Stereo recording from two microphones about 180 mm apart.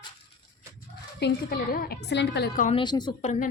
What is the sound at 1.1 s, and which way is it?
A woman's voice, 65° left (ahead or behind).